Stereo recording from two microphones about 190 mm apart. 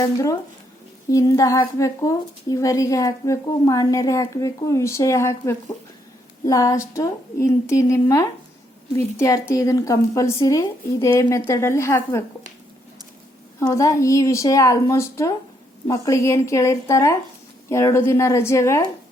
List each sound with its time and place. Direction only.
0.0 s a woman's voice: 15° left (ahead or behind)
13.6 s a woman's voice: 15° left (ahead or behind)